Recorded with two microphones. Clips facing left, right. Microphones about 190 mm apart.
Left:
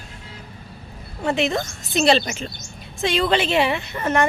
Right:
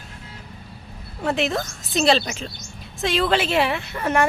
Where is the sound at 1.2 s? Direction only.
Centre (ahead or behind).